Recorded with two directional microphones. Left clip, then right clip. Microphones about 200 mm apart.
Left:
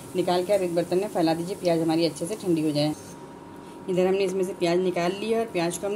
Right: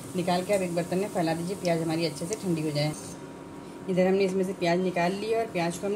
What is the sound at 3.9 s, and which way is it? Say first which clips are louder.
Speech: left 1 dB; 30° left (ahead or behind).